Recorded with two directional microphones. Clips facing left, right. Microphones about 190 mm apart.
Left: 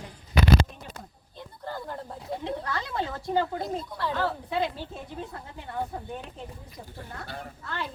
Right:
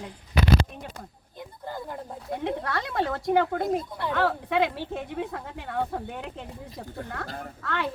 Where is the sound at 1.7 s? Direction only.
15° right (ahead or behind).